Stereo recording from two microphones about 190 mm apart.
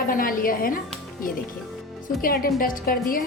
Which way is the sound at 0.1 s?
50° left (ahead or behind).